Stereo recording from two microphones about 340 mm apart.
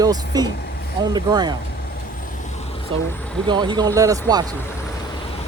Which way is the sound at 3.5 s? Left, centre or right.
Centre.